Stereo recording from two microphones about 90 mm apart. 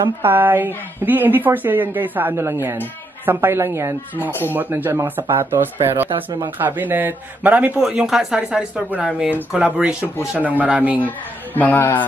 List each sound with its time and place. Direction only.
0.2 s a woman's voice: 25° right (ahead or behind)
4.3 s speech: 25° left (ahead or behind)
4.6 s a woman's voice: 20° right (ahead or behind)
7.8 s speech: 5° right (ahead or behind)
11.0 s speech: 20° left (ahead or behind)